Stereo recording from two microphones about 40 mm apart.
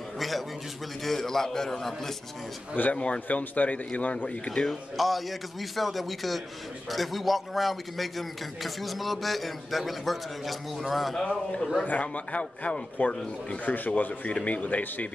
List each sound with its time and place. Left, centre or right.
1.0 s a man's voice: centre
2.7 s a man's voice: left
4.6 s a man's voice: centre
11.2 s a man's voice: left
11.8 s a man's voice: left
13.7 s speech: left
14.3 s a man's voice: left